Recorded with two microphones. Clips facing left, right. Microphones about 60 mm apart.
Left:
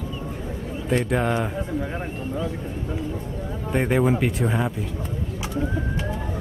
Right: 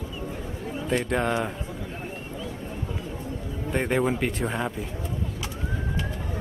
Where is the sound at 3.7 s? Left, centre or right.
Centre.